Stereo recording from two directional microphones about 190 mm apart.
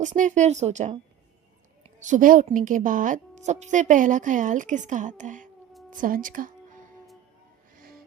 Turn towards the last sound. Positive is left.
turn(degrees=-50)  # may be behind; listen again after turning